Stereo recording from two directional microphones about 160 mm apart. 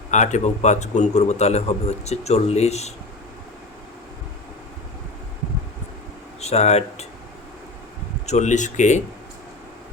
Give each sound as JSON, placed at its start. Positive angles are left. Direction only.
{"t": 0.1, "sound": "a man's voice", "side_deg": 50}
{"t": 6.4, "sound": "speech", "side_deg": 45}
{"t": 8.3, "sound": "a man's voice", "side_deg": 50}